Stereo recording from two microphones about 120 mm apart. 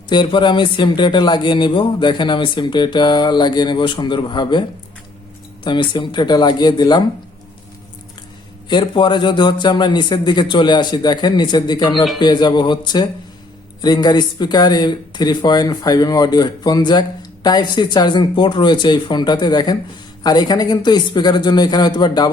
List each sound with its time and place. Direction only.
0.1 s speech: 40° left (ahead or behind)
5.6 s speech: 40° left (ahead or behind)
8.7 s speech: 40° left (ahead or behind)